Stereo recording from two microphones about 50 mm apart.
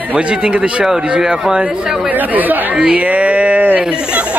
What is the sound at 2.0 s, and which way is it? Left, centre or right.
Speech, right.